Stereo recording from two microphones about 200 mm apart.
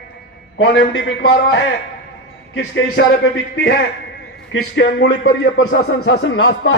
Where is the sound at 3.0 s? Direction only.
65° left (ahead or behind).